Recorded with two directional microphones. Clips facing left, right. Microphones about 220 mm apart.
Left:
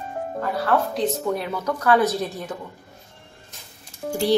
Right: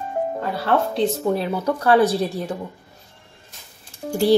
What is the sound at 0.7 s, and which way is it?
A woman's voice, 30° right (ahead or behind).